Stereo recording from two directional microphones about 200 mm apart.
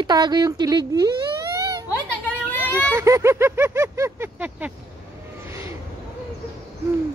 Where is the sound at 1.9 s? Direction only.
10° left (ahead or behind).